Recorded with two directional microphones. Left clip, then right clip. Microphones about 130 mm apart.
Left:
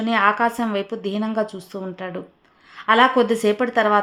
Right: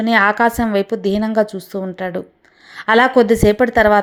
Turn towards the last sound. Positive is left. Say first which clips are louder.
# right 6 dB
turn(degrees=-35)  # may be behind; listen again after turning